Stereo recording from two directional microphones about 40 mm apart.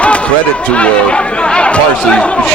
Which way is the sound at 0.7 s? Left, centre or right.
Left.